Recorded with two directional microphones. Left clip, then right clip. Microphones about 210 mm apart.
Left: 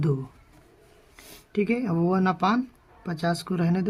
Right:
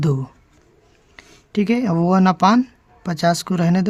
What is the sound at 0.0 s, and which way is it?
Speech, 40° right (ahead or behind).